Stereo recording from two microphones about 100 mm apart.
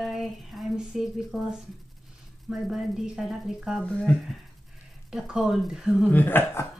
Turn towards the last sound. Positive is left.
turn(degrees=20)  # may be behind; listen again after turning